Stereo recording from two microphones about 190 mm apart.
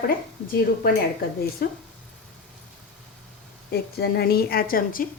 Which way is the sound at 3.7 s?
55° left (ahead or behind).